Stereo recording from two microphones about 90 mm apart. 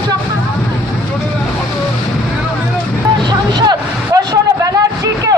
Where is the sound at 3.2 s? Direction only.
50° right (ahead or behind).